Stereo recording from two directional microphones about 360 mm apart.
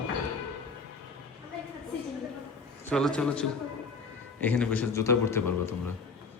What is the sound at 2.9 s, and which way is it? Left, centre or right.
A man's voice, centre.